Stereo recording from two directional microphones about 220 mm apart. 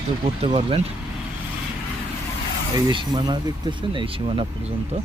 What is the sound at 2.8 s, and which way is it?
Speech, 20° right (ahead or behind).